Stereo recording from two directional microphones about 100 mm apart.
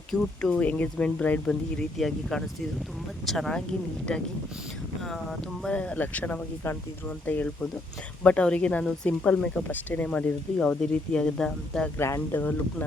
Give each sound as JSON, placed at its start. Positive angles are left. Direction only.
{"t": 0.1, "sound": "speech", "side_deg": 5}
{"t": 11.9, "sound": "speech", "side_deg": 25}